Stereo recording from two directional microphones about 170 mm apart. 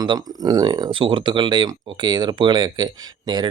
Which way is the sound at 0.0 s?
25° right (ahead or behind).